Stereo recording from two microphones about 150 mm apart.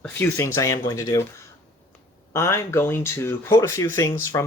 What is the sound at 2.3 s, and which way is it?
Speech, 20° left (ahead or behind).